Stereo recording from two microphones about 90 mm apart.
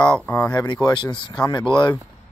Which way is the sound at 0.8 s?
60° left (ahead or behind).